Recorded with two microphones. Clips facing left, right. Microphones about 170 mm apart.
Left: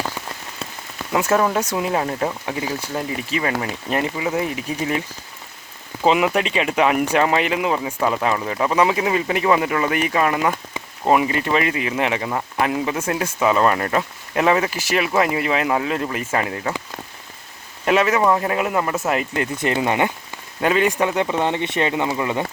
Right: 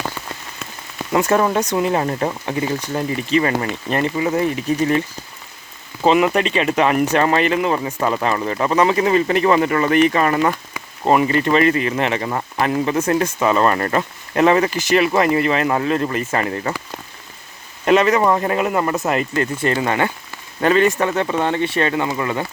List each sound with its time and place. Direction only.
1.1 s speech: 5° left (ahead or behind)
6.1 s speech: 5° left (ahead or behind)
17.8 s speech: 5° left (ahead or behind)
19.4 s speech: 20° left (ahead or behind)